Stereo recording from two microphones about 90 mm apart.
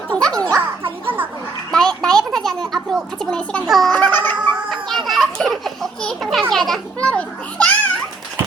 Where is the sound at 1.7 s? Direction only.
5° left (ahead or behind).